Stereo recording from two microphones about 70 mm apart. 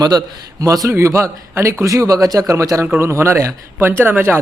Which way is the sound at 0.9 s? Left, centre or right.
Right.